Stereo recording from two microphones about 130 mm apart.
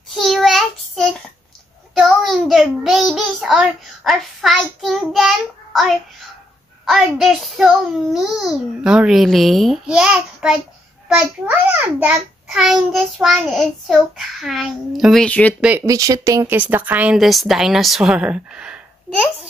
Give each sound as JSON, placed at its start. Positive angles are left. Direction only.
{"t": 0.1, "sound": "child singing", "side_deg": 0}
{"t": 6.9, "sound": "babbling", "side_deg": 0}
{"t": 11.1, "sound": "a child's voice", "side_deg": -5}
{"t": 15.2, "sound": "speech", "side_deg": 10}
{"t": 15.8, "sound": "speech", "side_deg": -25}
{"t": 16.5, "sound": "a woman's voice", "side_deg": -15}